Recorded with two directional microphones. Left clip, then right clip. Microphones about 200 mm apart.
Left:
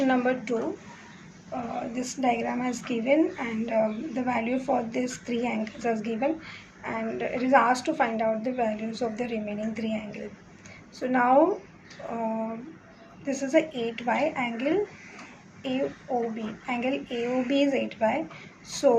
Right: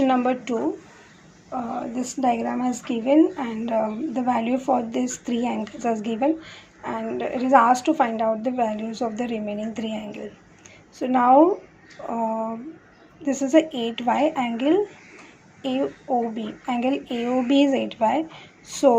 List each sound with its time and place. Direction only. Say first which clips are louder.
0.0 s speech: right 4 dB; 30° right (ahead or behind)
1.7 s a woman's voice: right 4 dB; 25° right (ahead or behind)
16.1 s a woman's voice: right 5 dB; 30° right (ahead or behind)